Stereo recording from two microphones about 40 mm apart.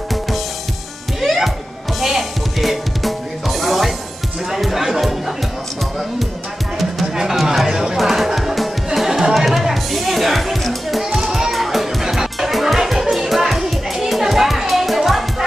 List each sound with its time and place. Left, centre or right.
1.2 s music: centre
6.8 s music: centre
8.0 s music: centre